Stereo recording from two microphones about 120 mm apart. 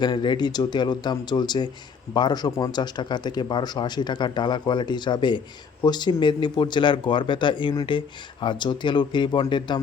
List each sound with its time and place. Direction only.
0.0 s speech: 40° left (ahead or behind)